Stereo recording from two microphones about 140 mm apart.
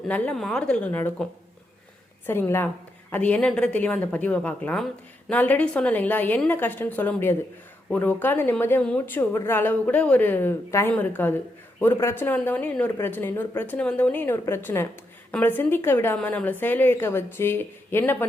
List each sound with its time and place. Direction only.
0.1 s a woman's voice: 5° left (ahead or behind)